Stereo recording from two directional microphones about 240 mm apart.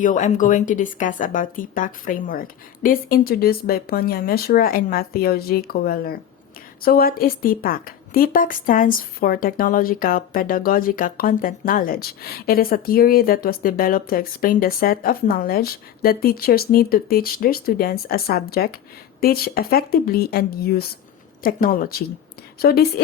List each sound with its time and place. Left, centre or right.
0.0 s a woman's voice: left